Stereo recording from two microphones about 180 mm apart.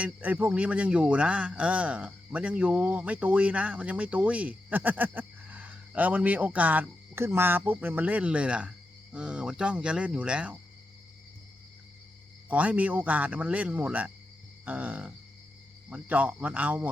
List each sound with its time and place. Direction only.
0.0 s a man's voice: 10° right (ahead or behind)
12.5 s a man's voice: 10° right (ahead or behind)
14.6 s frog: 10° right (ahead or behind)
15.9 s a man's voice: 10° right (ahead or behind)